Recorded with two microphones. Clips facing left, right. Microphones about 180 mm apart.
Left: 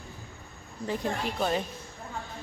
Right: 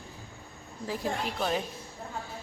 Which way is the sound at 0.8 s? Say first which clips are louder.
Left 2 dB; 5° right (ahead or behind).